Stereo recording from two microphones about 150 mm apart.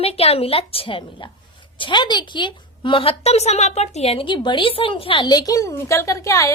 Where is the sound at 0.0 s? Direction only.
40° left (ahead or behind).